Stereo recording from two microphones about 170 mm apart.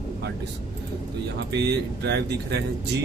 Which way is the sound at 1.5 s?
75° right (ahead or behind).